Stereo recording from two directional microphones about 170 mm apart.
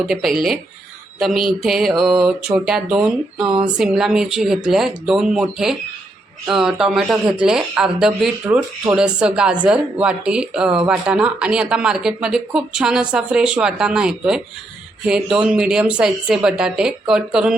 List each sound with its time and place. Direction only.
0.1 s speech: centre (ahead or behind)
8.4 s speech: 15° right (ahead or behind)
9.0 s speech: 5° right (ahead or behind)